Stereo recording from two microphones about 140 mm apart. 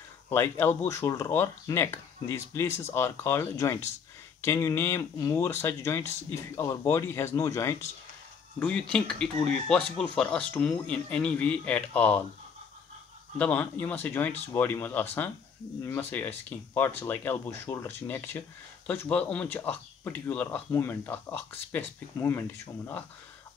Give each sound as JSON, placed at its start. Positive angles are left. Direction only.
{"t": 0.3, "sound": "speech", "side_deg": 15}
{"t": 8.5, "sound": "speech", "side_deg": 10}
{"t": 13.4, "sound": "speech", "side_deg": 10}